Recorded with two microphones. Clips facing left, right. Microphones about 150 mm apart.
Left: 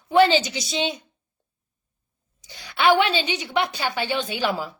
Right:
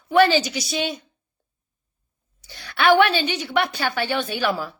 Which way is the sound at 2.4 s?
15° left (ahead or behind).